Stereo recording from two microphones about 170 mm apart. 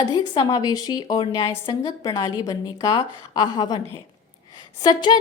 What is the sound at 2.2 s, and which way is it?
A woman's voice, 20° left (ahead or behind).